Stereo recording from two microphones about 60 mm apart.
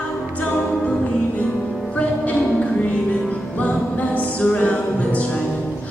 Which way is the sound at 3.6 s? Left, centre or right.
Left.